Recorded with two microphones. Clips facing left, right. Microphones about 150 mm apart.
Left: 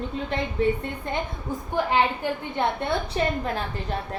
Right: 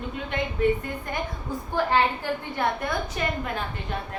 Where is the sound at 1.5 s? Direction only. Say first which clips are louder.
Even; 20° left (ahead or behind).